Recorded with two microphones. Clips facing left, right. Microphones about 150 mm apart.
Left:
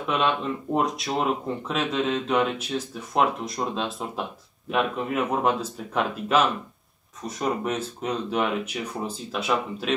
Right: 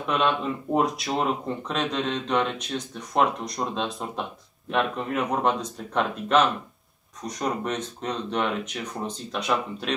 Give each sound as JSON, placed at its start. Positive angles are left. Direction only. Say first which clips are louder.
{"t": 0.0, "sound": "speech", "louder": "even", "side_deg": 0}